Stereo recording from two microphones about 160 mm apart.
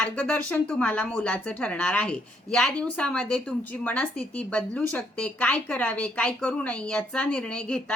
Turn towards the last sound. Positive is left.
turn(degrees=5)  # may be behind; listen again after turning